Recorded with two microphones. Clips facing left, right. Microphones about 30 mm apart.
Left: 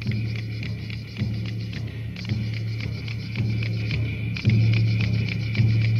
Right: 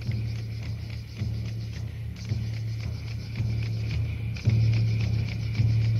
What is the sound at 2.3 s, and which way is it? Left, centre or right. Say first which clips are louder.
Music: left 5 dB; left.